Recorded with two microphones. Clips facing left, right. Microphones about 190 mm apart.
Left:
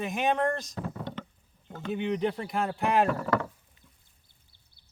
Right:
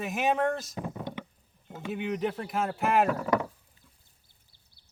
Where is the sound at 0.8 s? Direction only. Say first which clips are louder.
Even; 15° right (ahead or behind).